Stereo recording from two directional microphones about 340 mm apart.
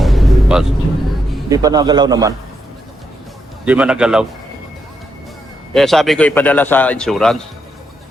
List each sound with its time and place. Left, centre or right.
0.0 s music: centre
1.5 s a man's voice: centre
3.7 s a man's voice: centre
5.7 s a man's voice: centre